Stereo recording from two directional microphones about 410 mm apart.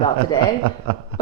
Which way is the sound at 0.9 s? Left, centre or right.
Right.